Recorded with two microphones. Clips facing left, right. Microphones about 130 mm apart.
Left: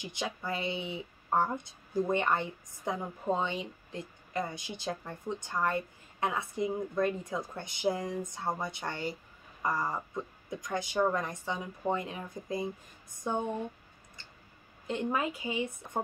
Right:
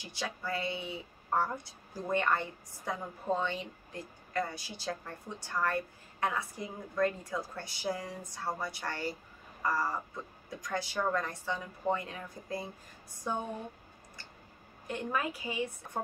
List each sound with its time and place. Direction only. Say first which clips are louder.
0.0 s a woman's voice: left 2 dB; 20° left (ahead or behind)
14.9 s a woman's voice: left 3 dB; 20° left (ahead or behind)